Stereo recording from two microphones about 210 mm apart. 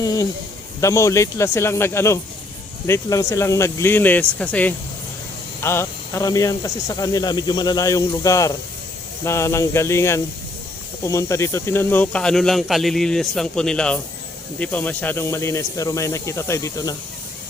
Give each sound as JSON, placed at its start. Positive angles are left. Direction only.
{"t": 0.0, "sound": "speech", "side_deg": 15}